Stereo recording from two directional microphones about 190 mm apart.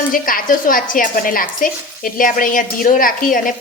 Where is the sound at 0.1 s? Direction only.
45° left (ahead or behind).